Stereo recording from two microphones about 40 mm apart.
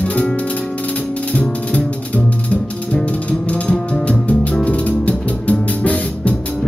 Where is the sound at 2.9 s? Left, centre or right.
Left.